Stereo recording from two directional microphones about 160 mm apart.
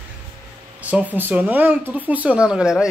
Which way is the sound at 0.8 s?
10° right (ahead or behind).